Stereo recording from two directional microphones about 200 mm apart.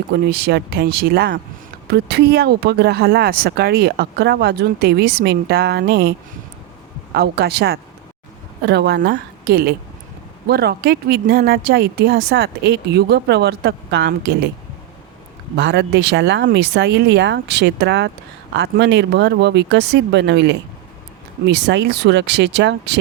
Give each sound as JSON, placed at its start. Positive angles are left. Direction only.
{"t": 0.1, "sound": "speech", "side_deg": -55}
{"t": 15.5, "sound": "speech", "side_deg": -60}